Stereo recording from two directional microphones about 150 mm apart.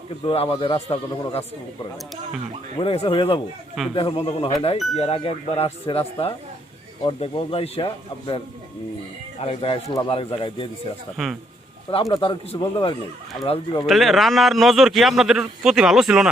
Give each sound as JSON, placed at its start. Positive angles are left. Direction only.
{"t": 0.3, "sound": "a man's voice", "side_deg": 35}
{"t": 9.4, "sound": "a man's voice", "side_deg": 40}
{"t": 11.2, "sound": "a man's voice", "side_deg": 0}
{"t": 12.1, "sound": "a man's voice", "side_deg": 35}
{"t": 13.8, "sound": "a man's voice", "side_deg": 0}